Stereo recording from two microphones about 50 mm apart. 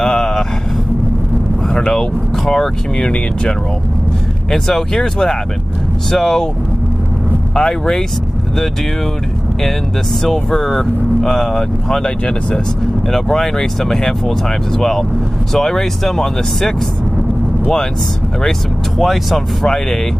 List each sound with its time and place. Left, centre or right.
0.0 s a sound: centre
1.7 s speech: centre
4.5 s speech: centre
7.5 s speech: centre
10.2 s speech: centre
12.3 s speech: left
13.1 s speech: centre
18.9 s speech: centre